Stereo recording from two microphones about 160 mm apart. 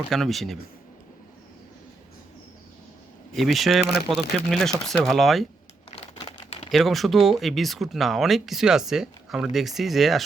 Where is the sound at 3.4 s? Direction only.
Centre (ahead or behind).